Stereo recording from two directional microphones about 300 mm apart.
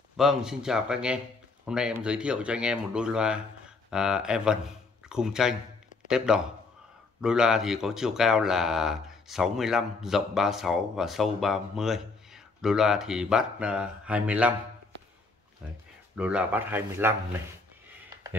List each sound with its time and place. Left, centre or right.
0.2 s a man's voice: centre
16.2 s speech: centre